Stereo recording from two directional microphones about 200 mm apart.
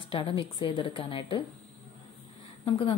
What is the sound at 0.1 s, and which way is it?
A woman's voice, 25° left (ahead or behind).